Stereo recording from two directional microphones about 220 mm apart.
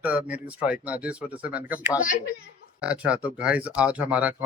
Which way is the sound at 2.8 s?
5° right (ahead or behind).